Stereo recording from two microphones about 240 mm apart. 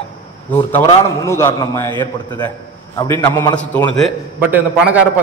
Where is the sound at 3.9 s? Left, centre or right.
Centre.